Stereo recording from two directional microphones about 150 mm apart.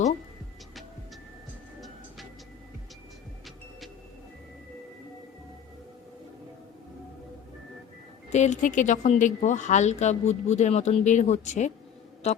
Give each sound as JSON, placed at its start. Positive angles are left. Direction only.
{"t": 8.3, "sound": "speech", "side_deg": 50}
{"t": 12.2, "sound": "music", "side_deg": 45}